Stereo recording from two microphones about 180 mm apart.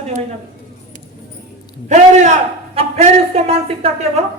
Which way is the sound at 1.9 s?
40° right (ahead or behind).